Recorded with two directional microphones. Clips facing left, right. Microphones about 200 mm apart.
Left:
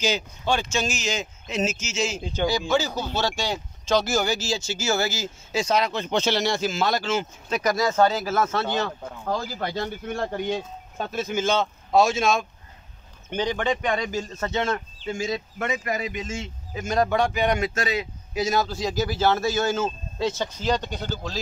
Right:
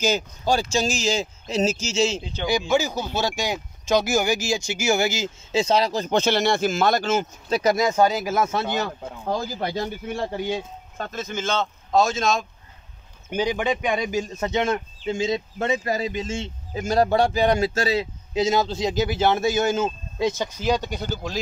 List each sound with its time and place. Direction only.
0.0 s speech: 40° right (ahead or behind)
2.7 s speech: 10° right (ahead or behind); by 7.7 s 35° right (ahead or behind)
7.7 s speech: 15° right (ahead or behind)
10.0 s speech: 5° right (ahead or behind)
11.0 s speech: 10° left (ahead or behind)
13.3 s speech: 10° right (ahead or behind)